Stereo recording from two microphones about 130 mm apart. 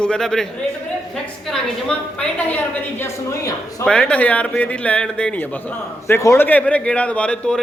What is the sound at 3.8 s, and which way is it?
A man's voice, 10° left (ahead or behind).